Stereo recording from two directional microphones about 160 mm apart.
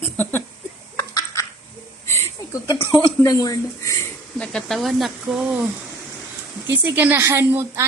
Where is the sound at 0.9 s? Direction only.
20° left (ahead or behind).